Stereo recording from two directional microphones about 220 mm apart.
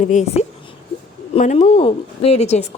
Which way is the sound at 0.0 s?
35° left (ahead or behind).